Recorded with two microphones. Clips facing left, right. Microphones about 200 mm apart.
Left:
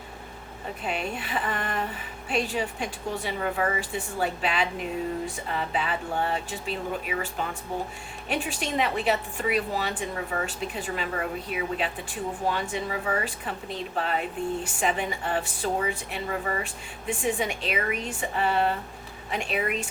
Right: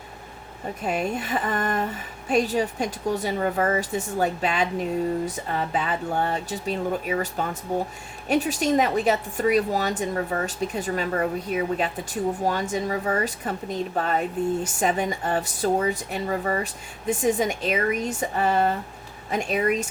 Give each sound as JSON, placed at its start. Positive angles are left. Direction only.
{"t": 0.9, "sound": "a woman's voice", "side_deg": -45}